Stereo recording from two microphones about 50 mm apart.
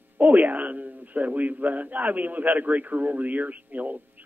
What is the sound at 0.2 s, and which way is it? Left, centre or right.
Speech, right.